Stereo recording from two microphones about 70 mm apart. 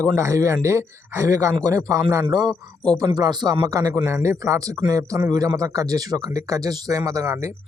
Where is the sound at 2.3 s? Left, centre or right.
Right.